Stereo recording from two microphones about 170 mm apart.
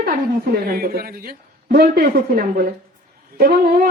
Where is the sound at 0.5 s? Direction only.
60° right (ahead or behind).